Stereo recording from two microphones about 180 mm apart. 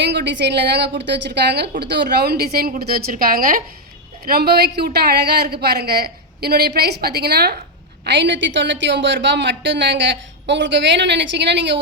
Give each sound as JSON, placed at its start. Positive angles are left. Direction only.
{"t": 0.0, "sound": "a woman's voice", "side_deg": -75}
{"t": 8.0, "sound": "a woman's voice", "side_deg": -75}